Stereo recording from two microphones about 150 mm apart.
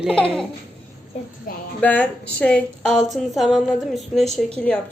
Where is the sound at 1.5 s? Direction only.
75° left (ahead or behind).